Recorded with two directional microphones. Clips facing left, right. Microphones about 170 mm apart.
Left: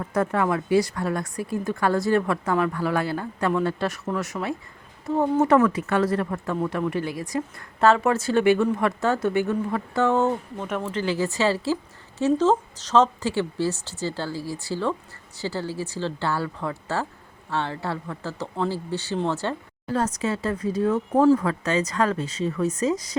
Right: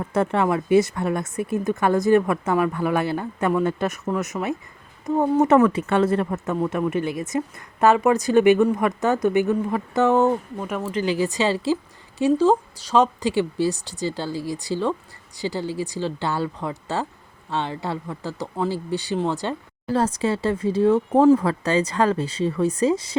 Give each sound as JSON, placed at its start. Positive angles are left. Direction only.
{"t": 0.0, "sound": "speech", "side_deg": -25}
{"t": 19.9, "sound": "speech", "side_deg": -30}